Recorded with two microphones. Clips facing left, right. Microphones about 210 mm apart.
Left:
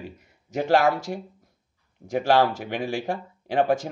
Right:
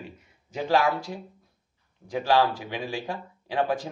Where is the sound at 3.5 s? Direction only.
50° left (ahead or behind).